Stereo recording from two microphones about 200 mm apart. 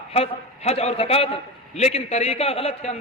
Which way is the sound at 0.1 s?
30° left (ahead or behind).